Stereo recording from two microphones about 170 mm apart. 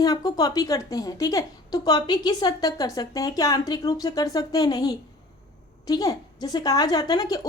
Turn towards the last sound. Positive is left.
turn(degrees=20)  # may be behind; listen again after turning